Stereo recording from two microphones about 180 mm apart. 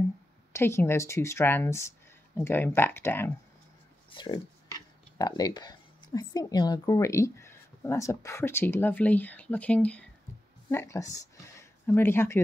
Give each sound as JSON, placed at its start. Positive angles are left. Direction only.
{"t": 0.5, "sound": "speech", "side_deg": 15}
{"t": 4.1, "sound": "speech", "side_deg": 25}